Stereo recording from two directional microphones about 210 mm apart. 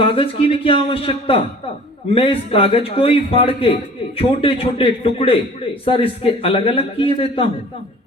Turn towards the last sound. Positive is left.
turn(degrees=25)  # may be behind; listen again after turning